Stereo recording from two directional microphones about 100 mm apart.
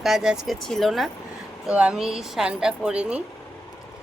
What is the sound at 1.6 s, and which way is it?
Speech, 10° right (ahead or behind).